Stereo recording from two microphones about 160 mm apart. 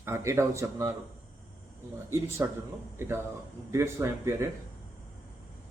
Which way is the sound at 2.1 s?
15° right (ahead or behind).